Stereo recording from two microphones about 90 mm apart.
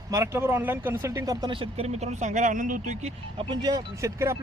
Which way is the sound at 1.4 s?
75° right (ahead or behind).